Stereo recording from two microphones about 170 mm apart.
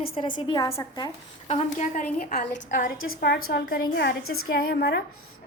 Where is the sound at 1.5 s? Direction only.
40° left (ahead or behind); by 5.0 s 70° left (ahead or behind).